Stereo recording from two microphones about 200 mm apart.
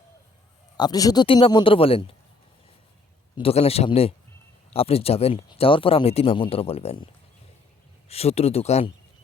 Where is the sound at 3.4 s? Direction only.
30° left (ahead or behind).